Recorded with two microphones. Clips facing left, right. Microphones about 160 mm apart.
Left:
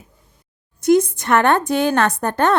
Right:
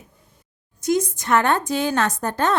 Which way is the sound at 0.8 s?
60° left (ahead or behind).